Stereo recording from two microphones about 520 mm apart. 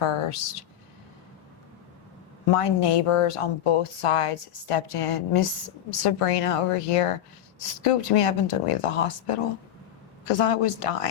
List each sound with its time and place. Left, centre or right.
0.0 s speech: left
2.5 s speech: left
6.0 s a woman's voice: left